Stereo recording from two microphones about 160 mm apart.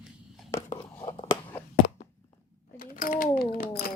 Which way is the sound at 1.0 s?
35° left (ahead or behind).